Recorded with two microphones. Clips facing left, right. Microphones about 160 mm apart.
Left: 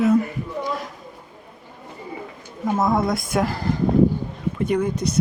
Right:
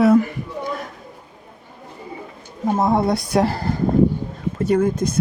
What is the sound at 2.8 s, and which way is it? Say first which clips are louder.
Speech: right 2 dB; 30° right (ahead or behind).